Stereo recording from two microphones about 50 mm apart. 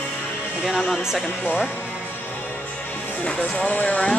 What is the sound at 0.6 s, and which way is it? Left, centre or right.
Speech, centre.